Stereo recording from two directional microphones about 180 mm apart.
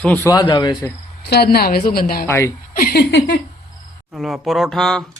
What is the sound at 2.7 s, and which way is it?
Speech, 60° left (ahead or behind).